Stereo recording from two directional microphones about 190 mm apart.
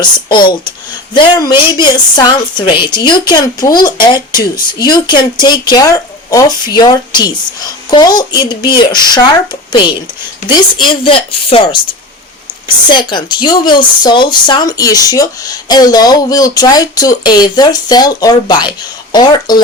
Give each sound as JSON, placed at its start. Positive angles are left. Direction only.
{"t": 0.0, "sound": "speech", "side_deg": 25}